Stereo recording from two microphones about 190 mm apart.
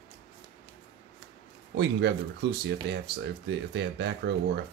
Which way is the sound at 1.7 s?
60° right (ahead or behind).